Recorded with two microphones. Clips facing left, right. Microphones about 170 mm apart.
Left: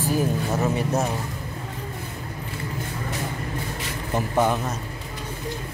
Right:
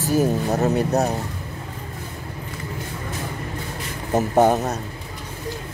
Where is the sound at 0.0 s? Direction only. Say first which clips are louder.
Right 4 dB; 40° right (ahead or behind).